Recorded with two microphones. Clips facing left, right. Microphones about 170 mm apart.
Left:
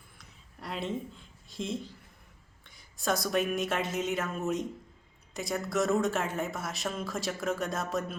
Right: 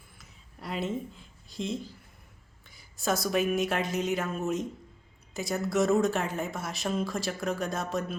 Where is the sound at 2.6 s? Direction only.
5° right (ahead or behind).